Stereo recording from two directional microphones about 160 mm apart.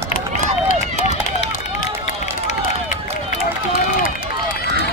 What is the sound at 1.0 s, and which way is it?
Run, 45° left (ahead or behind).